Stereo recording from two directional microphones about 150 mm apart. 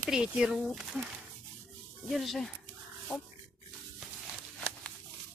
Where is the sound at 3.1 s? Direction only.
20° left (ahead or behind).